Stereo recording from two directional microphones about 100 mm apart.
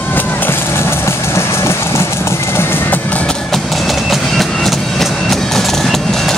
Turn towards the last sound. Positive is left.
turn(degrees=5)  # may be behind; listen again after turning